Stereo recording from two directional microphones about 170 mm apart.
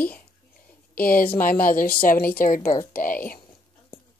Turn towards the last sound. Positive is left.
turn(degrees=55)  # may be behind; listen again after turning